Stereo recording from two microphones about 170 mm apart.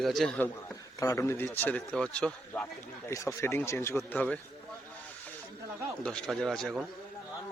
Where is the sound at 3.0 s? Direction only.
15° left (ahead or behind).